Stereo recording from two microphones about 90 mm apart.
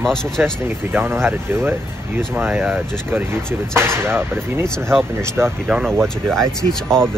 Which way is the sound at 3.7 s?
25° right (ahead or behind).